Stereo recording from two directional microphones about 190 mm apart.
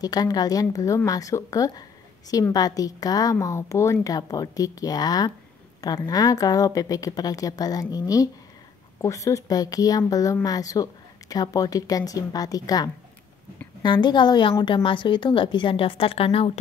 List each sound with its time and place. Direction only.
0.0 s a woman's voice: 20° left (ahead or behind)